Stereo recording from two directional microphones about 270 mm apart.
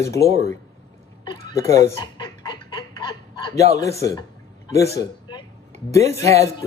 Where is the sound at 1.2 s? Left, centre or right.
Centre.